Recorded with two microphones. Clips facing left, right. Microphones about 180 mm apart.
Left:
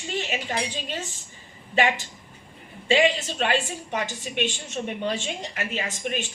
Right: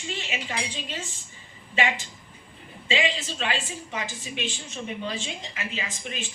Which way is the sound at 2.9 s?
55° left (ahead or behind).